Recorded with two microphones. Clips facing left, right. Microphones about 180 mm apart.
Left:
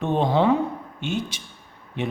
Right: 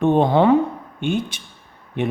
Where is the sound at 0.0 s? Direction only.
55° right (ahead or behind).